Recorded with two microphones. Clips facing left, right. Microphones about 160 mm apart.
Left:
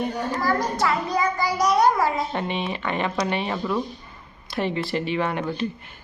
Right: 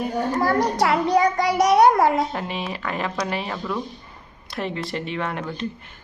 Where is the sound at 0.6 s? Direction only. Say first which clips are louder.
Right 4 dB; 75° right (ahead or behind).